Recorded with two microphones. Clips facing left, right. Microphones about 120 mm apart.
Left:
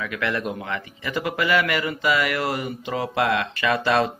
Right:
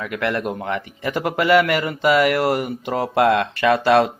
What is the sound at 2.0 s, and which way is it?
Speech, 65° right (ahead or behind).